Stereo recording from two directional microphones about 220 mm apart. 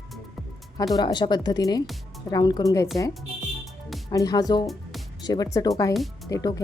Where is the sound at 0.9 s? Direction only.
20° left (ahead or behind).